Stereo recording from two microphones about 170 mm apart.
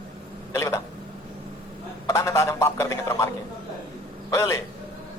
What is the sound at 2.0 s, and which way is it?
A man's voice, 20° left (ahead or behind).